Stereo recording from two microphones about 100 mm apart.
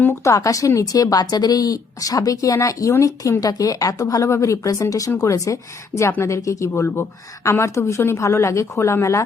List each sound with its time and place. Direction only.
0.0 s a woman's voice: 30° left (ahead or behind)